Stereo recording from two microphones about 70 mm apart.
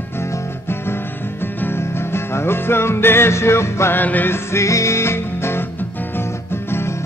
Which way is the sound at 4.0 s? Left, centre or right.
Left.